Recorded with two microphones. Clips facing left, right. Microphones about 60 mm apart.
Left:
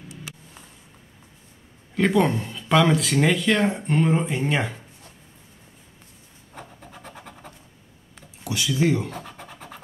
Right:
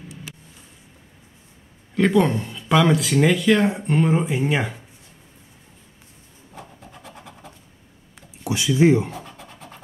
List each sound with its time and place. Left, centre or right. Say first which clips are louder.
2.0 s speech: right 2 dB; centre
8.5 s speech: right 5 dB; right
9.1 s scratch: even; centre